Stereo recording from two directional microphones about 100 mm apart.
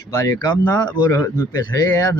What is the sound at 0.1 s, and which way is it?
Speech, 35° left (ahead or behind).